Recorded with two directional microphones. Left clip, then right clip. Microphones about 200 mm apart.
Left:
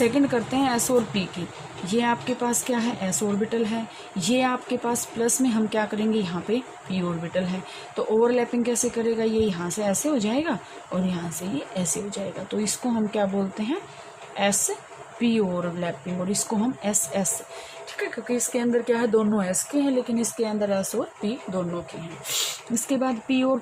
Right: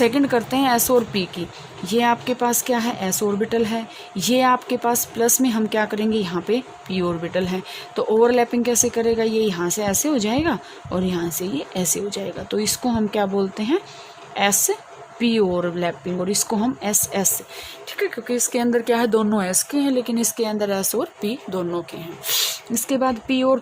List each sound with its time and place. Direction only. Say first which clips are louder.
0.0 s speech: right 4 dB; 55° right (ahead or behind)